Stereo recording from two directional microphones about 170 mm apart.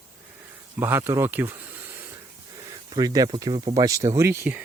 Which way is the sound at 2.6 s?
25° right (ahead or behind).